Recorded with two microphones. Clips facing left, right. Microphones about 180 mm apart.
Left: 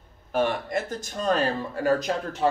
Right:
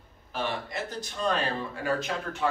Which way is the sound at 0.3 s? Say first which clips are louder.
Left 8 dB; 50° left (ahead or behind).